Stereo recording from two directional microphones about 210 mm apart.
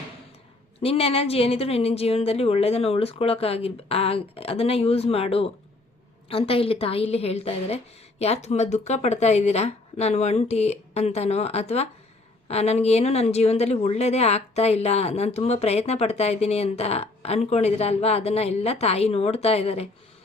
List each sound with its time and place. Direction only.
0.8 s a woman's voice: 30° left (ahead or behind)